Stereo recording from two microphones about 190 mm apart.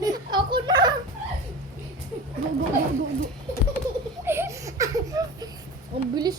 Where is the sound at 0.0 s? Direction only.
20° right (ahead or behind).